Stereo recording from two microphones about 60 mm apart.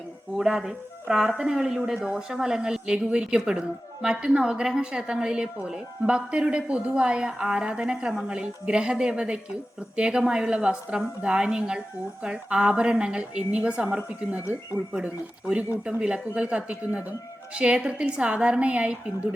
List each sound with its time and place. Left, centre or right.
0.3 s a woman's voice: centre